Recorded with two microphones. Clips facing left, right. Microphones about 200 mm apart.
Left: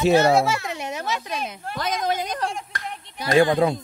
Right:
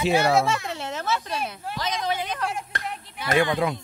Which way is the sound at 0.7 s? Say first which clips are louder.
Even; 15° left (ahead or behind).